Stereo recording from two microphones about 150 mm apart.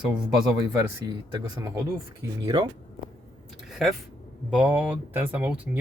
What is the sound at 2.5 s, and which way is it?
Speech, 30° right (ahead or behind).